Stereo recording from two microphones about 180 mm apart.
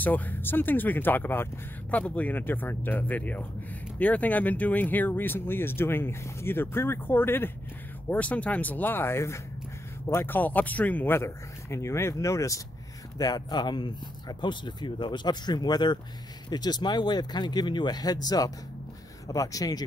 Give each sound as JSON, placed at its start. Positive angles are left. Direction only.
{"t": 0.0, "sound": "speech", "side_deg": 10}